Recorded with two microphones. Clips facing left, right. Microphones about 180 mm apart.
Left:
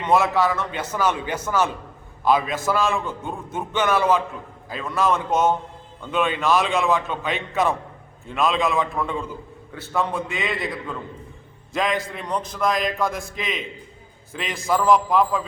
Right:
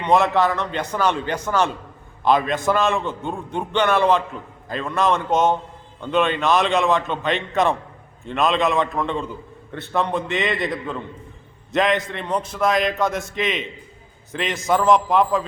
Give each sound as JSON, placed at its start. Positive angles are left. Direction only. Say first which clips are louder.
{"t": 0.2, "sound": "a man's voice", "louder": "right 2 dB", "side_deg": 5}
{"t": 5.3, "sound": "a man's voice", "louder": "right 2 dB", "side_deg": -20}
{"t": 6.1, "sound": "a man's voice", "louder": "right 2 dB", "side_deg": 5}